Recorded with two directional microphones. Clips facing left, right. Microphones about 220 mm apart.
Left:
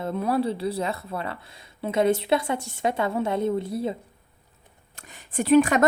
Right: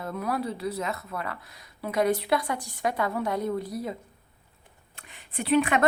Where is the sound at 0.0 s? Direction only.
25° left (ahead or behind).